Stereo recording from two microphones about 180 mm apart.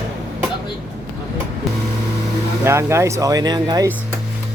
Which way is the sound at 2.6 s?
15° right (ahead or behind).